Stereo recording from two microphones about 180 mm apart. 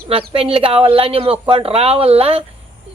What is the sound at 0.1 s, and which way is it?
Speech, 30° right (ahead or behind).